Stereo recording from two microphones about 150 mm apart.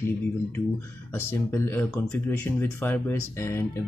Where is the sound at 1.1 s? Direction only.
15° left (ahead or behind).